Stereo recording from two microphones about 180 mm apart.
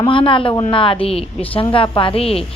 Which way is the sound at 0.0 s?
30° left (ahead or behind).